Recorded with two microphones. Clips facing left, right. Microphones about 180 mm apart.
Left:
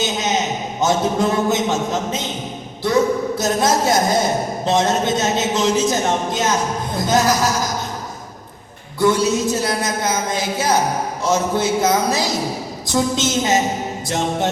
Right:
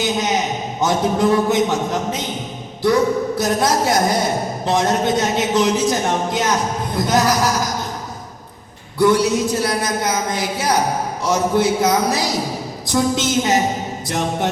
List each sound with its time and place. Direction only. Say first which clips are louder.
0.0 s a man's voice: right 1 dB; 25° left (ahead or behind)
9.0 s speech: right 1 dB; 25° left (ahead or behind)